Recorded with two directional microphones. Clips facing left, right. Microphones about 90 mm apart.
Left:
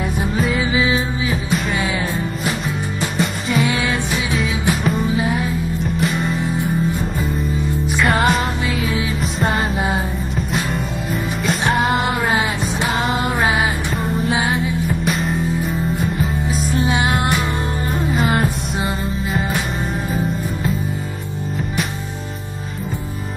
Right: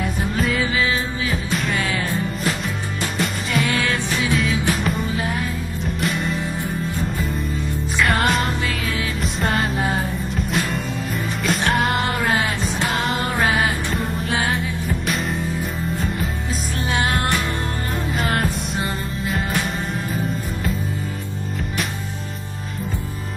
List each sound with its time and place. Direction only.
0.0 s music: centre (ahead or behind)
0.6 s music: 15° left (ahead or behind)
3.2 s music: centre (ahead or behind)
3.8 s music: 15° left (ahead or behind)
8.0 s music: centre (ahead or behind)
11.4 s music: centre (ahead or behind)
12.1 s music: 20° left (ahead or behind)
12.9 s music: centre (ahead or behind)
13.3 s music: 20° left (ahead or behind)
13.9 s music: centre (ahead or behind)
16.8 s music: 15° left (ahead or behind)
18.1 s music: centre (ahead or behind)